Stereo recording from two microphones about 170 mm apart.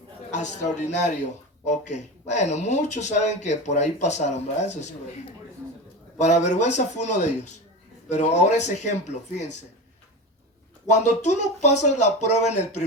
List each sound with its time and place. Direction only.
0.3 s speech: 45° left (ahead or behind)
6.1 s speech: 45° left (ahead or behind)
10.8 s speech: 45° left (ahead or behind)